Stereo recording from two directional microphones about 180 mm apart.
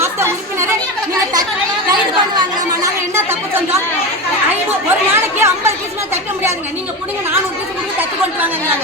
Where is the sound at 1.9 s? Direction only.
20° right (ahead or behind).